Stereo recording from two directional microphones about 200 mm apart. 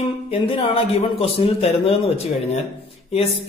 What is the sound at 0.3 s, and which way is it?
A man's voice, 30° left (ahead or behind).